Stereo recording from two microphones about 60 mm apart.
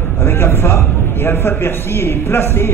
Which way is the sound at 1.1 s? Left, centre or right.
Left.